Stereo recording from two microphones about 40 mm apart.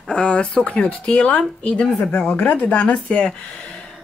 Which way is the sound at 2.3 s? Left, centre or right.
Left.